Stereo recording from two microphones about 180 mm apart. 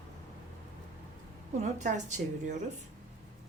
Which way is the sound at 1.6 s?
40° right (ahead or behind).